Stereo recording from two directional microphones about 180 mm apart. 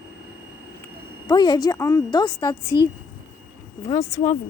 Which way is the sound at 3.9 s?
20° left (ahead or behind).